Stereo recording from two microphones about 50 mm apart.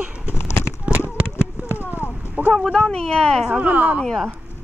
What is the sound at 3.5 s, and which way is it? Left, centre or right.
Speech, right.